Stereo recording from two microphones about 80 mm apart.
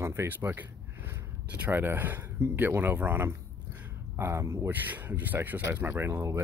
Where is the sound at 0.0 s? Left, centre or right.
Right.